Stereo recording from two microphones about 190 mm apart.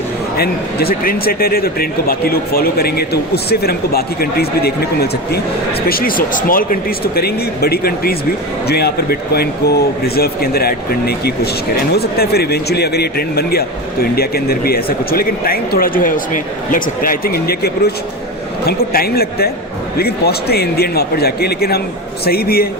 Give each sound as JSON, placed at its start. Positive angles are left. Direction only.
{"t": 0.3, "sound": "a man's voice", "side_deg": 55}